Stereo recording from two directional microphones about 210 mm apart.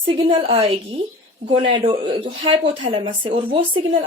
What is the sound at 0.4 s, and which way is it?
Speech, 25° right (ahead or behind).